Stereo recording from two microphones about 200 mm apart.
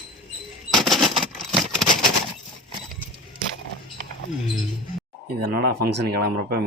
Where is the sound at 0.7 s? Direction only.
Centre (ahead or behind).